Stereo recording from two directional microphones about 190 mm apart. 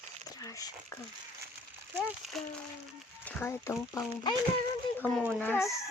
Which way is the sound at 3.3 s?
10° left (ahead or behind).